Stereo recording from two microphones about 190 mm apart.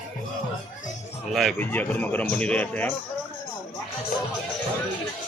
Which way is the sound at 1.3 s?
Centre (ahead or behind).